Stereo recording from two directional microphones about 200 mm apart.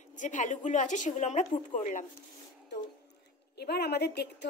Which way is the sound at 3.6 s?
55° left (ahead or behind).